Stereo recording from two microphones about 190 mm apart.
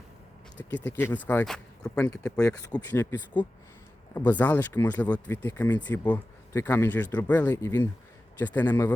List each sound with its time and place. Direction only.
0.5 s speech: 5° left (ahead or behind)
2.6 s speech: 15° left (ahead or behind)